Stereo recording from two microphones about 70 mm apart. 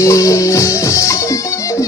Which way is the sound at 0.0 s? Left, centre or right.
Left.